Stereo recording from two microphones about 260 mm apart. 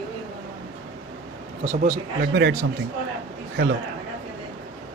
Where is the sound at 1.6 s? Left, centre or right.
Right.